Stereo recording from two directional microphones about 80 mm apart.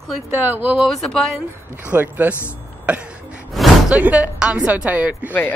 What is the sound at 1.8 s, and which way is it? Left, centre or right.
Speech, right.